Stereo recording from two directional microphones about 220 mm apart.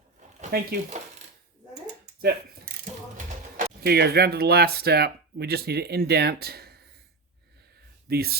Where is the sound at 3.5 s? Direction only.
45° right (ahead or behind).